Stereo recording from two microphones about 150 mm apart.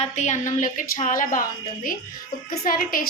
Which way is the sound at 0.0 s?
50° left (ahead or behind).